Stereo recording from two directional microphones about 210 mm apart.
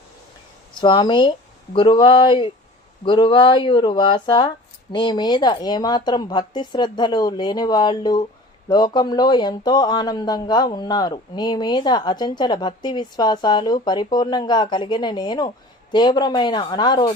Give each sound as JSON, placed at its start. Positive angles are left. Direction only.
{"t": 0.7, "sound": "speech", "side_deg": 20}